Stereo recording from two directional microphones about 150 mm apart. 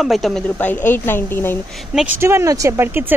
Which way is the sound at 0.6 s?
15° left (ahead or behind).